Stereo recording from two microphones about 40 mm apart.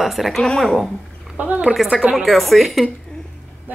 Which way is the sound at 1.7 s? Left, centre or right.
Centre.